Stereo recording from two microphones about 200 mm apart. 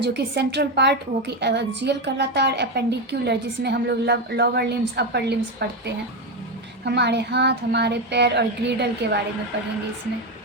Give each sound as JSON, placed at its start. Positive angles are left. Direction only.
{"t": 0.0, "sound": "a woman's voice", "side_deg": -60}